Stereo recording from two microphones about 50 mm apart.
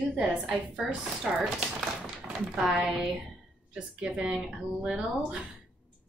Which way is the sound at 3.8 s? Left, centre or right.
Centre.